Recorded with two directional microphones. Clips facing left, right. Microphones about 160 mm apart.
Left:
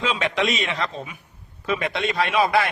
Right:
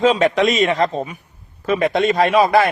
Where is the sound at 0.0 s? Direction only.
45° right (ahead or behind).